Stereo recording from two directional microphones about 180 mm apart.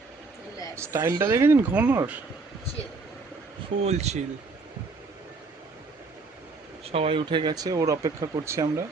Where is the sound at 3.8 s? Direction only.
35° right (ahead or behind).